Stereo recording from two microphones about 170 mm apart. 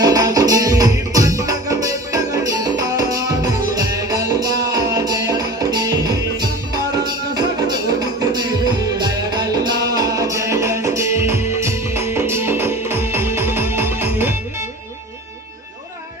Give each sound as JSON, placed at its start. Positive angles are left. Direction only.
{"t": 0.0, "sound": "music", "side_deg": -20}
{"t": 8.2, "sound": "music", "side_deg": -25}